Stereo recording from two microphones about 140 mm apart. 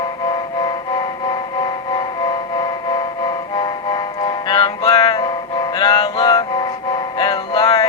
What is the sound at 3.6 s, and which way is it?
Music, 30° left (ahead or behind).